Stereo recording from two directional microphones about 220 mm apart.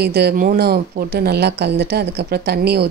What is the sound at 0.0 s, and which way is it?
Speech, 45° right (ahead or behind).